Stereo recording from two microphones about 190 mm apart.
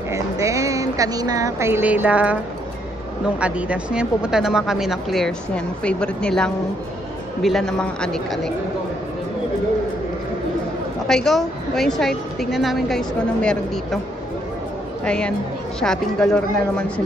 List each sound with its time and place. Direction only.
0.1 s a sound: 15° right (ahead or behind)
3.3 s a woman's voice: 5° right (ahead or behind)
11.1 s a woman's voice: centre (ahead or behind)
15.0 s a woman's voice: 5° left (ahead or behind)